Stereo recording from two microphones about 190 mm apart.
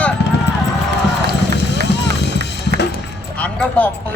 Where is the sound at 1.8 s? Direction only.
65° left (ahead or behind).